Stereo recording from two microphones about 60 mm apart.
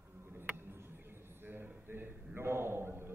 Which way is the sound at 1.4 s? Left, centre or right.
Right.